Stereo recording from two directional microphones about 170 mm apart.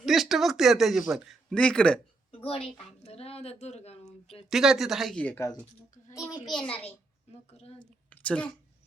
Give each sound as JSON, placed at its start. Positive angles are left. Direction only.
{"t": 0.0, "sound": "speech", "side_deg": 0}
{"t": 2.3, "sound": "a woman's voice", "side_deg": 35}
{"t": 4.4, "sound": "speech", "side_deg": 0}
{"t": 7.5, "sound": "a woman's voice", "side_deg": 35}
{"t": 7.8, "sound": "a woman's voice", "side_deg": 5}